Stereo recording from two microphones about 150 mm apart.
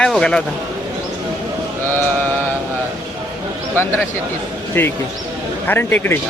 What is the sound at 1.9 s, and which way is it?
Mantra, 15° left (ahead or behind).